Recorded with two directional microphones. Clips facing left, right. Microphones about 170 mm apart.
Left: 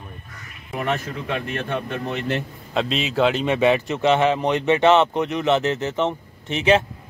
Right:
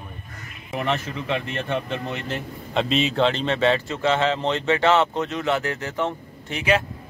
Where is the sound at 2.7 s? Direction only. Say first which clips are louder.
Right 2 dB; centre (ahead or behind).